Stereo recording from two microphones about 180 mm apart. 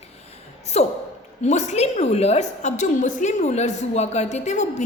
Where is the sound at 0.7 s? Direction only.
35° left (ahead or behind).